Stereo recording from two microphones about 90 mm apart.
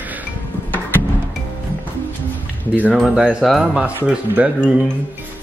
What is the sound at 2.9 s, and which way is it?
Speech, 5° right (ahead or behind).